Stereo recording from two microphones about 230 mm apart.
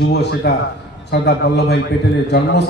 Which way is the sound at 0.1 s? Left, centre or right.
Left.